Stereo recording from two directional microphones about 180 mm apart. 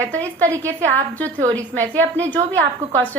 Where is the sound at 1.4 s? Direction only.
15° right (ahead or behind).